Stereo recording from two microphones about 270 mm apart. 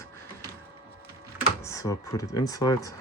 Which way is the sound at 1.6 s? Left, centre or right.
Centre.